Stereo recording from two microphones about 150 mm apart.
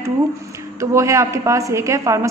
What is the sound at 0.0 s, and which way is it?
A woman's voice, 20° right (ahead or behind).